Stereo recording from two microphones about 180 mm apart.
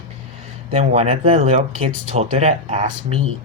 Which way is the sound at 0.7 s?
35° right (ahead or behind).